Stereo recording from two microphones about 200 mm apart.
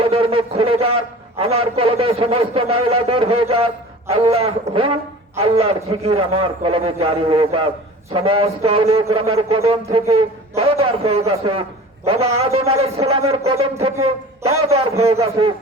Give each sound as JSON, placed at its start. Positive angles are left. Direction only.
{"t": 0.0, "sound": "a man's voice", "side_deg": -30}
{"t": 14.7, "sound": "a man's voice", "side_deg": -30}